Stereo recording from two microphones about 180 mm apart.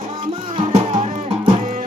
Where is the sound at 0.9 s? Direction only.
35° right (ahead or behind).